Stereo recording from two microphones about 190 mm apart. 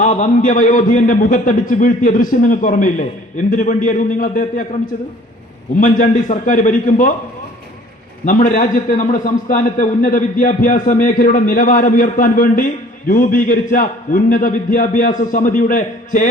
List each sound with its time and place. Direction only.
0.0 s a man's voice: 40° left (ahead or behind)
5.8 s a man's voice: 45° left (ahead or behind)
8.2 s a man's voice: 45° left (ahead or behind)